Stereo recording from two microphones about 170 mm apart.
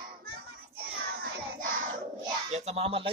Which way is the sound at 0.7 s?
65° right (ahead or behind).